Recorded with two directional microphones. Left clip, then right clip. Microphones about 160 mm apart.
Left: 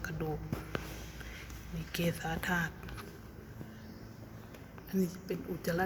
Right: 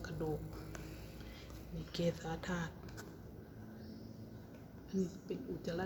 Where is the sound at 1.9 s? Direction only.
10° left (ahead or behind).